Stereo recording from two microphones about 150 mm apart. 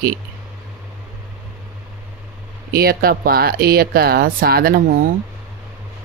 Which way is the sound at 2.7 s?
90° right.